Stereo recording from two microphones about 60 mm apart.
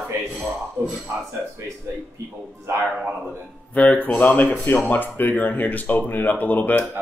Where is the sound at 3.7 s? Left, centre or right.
Left.